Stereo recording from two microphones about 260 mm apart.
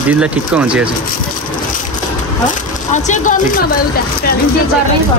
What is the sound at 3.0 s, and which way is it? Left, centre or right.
Speech, left.